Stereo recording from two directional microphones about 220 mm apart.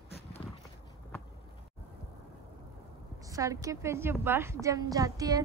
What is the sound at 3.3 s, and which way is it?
Speech, 15° right (ahead or behind).